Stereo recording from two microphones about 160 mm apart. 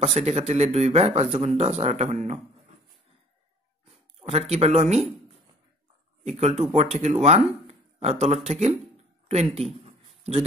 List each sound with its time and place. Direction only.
0.0 s speech: 40° right (ahead or behind)
3.8 s speech: 40° right (ahead or behind)
6.2 s speech: 40° right (ahead or behind)
9.8 s a sound: 40° right (ahead or behind)